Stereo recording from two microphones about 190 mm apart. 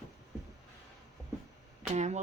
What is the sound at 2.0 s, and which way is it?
Speech, 35° right (ahead or behind).